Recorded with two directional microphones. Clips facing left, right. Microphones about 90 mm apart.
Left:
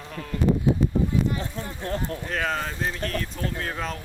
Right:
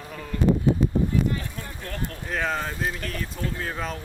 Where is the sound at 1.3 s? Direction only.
25° left (ahead or behind).